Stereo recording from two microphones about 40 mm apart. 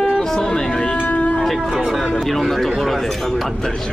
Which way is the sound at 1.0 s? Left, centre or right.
Left.